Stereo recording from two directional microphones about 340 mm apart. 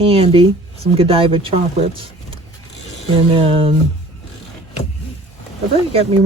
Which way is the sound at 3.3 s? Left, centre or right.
Centre.